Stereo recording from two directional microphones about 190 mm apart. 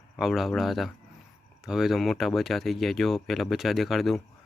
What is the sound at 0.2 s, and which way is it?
Speech, centre (ahead or behind).